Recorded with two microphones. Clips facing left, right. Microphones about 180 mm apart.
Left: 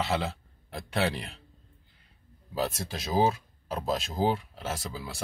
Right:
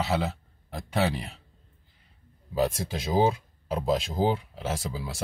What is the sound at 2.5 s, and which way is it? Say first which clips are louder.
Speech: right 5 dB; 15° right (ahead or behind).